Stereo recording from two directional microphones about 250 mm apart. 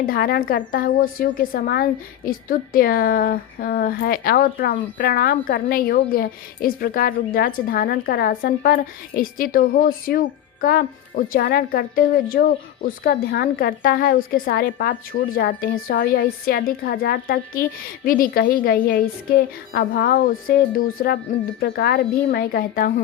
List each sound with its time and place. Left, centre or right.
0.0 s a woman's voice: left